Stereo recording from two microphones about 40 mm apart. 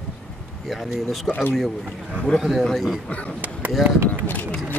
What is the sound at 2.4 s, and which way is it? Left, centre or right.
Speech, centre.